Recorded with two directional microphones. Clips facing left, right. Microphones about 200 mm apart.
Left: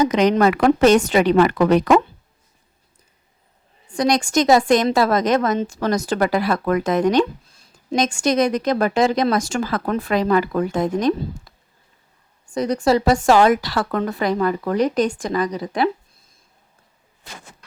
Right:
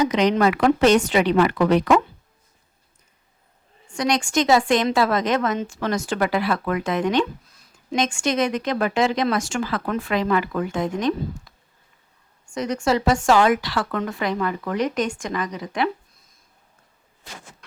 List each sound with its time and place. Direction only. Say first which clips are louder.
0.0 s speech: left 3 dB; 45° left (ahead or behind)
3.8 s a woman's voice: left 4 dB; 35° left (ahead or behind)